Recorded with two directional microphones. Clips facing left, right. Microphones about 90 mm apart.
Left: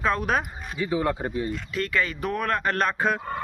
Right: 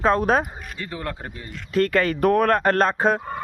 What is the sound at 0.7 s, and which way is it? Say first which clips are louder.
Speech: left 7 dB; 10° left (ahead or behind).